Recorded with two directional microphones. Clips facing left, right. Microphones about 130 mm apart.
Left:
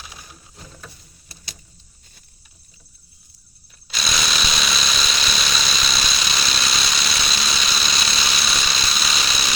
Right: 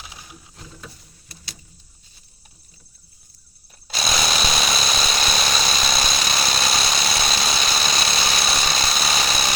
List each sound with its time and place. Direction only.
3.8 s jackhammer: 45° right (ahead or behind)